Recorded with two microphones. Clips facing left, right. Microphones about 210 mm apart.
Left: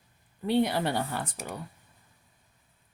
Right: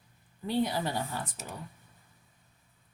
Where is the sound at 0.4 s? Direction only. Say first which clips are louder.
Left 4 dB; 70° left (ahead or behind).